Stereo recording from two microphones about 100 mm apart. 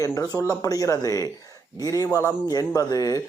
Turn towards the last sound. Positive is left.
turn(degrees=35)  # may be behind; listen again after turning